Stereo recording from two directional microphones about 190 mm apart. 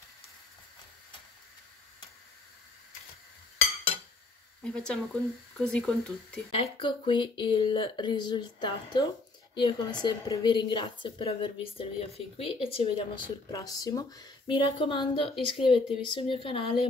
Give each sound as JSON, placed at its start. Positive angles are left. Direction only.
{"t": 4.6, "sound": "speech", "side_deg": 5}
{"t": 6.5, "sound": "speech", "side_deg": 25}
{"t": 13.5, "sound": "speech", "side_deg": 20}